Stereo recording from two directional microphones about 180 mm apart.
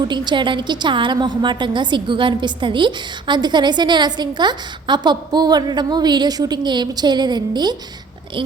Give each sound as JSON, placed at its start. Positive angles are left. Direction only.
{"t": 0.1, "sound": "a woman's voice", "side_deg": -25}